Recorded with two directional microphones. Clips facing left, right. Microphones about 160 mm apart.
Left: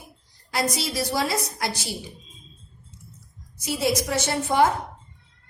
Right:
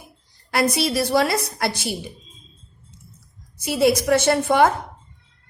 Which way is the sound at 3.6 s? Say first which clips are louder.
Right 7 dB; 60° right (ahead or behind).